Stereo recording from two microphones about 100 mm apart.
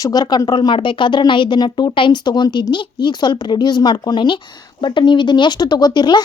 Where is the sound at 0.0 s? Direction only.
40° left (ahead or behind).